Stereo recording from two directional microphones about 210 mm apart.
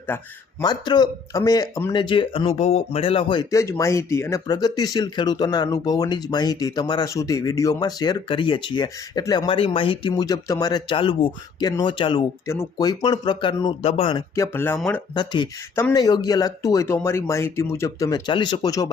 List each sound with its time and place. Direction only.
0.1 s speech: 10° left (ahead or behind)
0.6 s speech: 20° left (ahead or behind)
15.1 s speech: 20° left (ahead or behind)